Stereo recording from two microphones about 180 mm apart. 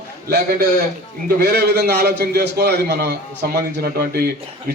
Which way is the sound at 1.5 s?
65° right (ahead or behind).